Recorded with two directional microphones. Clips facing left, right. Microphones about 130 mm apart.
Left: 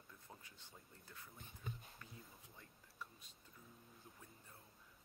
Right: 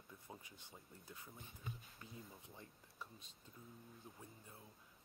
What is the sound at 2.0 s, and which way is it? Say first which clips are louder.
Speech: right 4 dB; 20° right (ahead or behind).